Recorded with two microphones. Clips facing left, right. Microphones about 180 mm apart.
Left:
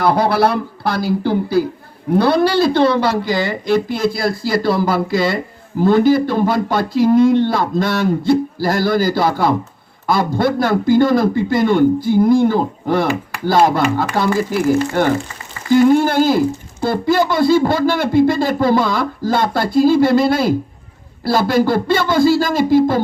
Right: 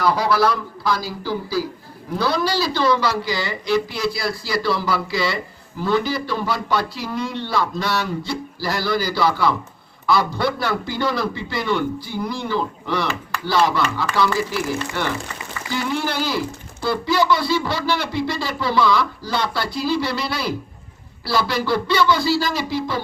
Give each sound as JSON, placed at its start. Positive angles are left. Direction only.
{"t": 0.0, "sound": "a man's voice", "side_deg": 55}